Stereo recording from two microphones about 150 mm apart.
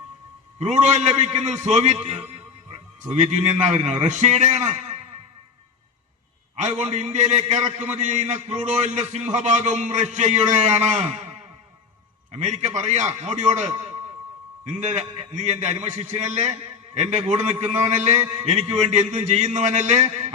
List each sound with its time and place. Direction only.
0.6 s a man's voice: 50° right (ahead or behind)
3.2 s a man's voice: 50° right (ahead or behind)
6.6 s a man's voice: 50° right (ahead or behind)
12.3 s a man's voice: 50° right (ahead or behind)